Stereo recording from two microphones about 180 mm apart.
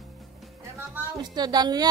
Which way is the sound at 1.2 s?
20° right (ahead or behind).